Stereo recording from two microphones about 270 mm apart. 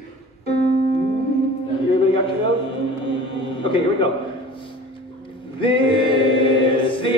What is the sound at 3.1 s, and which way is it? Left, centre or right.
Music, centre.